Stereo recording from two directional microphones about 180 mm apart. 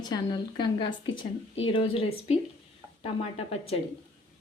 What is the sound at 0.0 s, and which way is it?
A woman's voice, 20° left (ahead or behind).